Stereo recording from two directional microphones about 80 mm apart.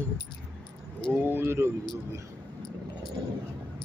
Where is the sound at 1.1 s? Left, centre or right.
Right.